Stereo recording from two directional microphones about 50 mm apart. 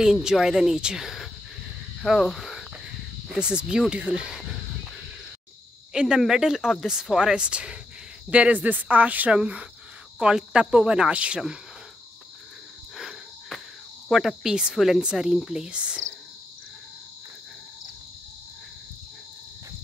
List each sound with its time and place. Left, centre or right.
0.0 s speech: centre
1.0 s whispering: centre
2.0 s a sound: centre
3.3 s speech: centre
5.9 s speech: centre; by 9.3 s right
9.3 s speech: right
14.0 s cricket: centre
14.5 s speech: centre